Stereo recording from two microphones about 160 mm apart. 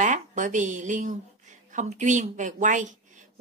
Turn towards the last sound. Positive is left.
turn(degrees=-50)  # may be behind; listen again after turning